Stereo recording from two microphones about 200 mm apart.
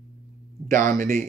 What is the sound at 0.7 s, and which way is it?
Speech, 40° right (ahead or behind).